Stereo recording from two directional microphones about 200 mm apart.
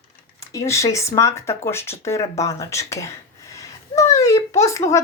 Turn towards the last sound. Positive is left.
turn(degrees=15)  # may be behind; listen again after turning